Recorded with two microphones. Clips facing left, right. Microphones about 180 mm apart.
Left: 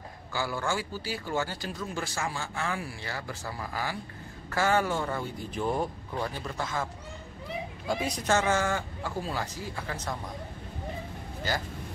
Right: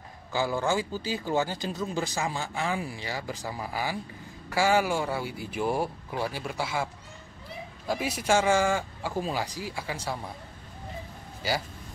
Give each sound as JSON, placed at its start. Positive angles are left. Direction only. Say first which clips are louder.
{"t": 0.3, "sound": "speech", "louder": "right 4 dB", "side_deg": -20}
{"t": 7.9, "sound": "speech", "louder": "right 2 dB", "side_deg": -5}